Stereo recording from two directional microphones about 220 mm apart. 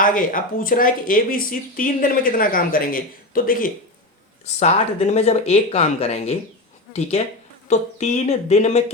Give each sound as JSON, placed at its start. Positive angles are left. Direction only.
{"t": 0.0, "sound": "speech", "side_deg": 40}
{"t": 7.7, "sound": "speech", "side_deg": 30}